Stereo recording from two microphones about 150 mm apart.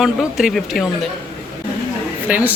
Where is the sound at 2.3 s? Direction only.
10° right (ahead or behind).